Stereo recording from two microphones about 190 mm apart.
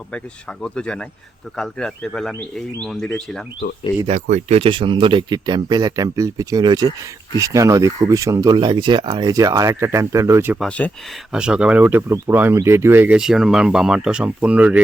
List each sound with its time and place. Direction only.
0.6 s speech: 5° left (ahead or behind)
4.0 s speech: 40° right (ahead or behind); by 10.6 s 15° right (ahead or behind)
10.6 s speech: 5° left (ahead or behind)
11.3 s speech: 5° right (ahead or behind)